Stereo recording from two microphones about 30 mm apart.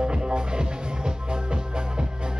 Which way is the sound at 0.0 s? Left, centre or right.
Right.